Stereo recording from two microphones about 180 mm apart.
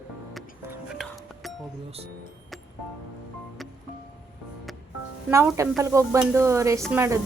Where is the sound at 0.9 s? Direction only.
Centre (ahead or behind).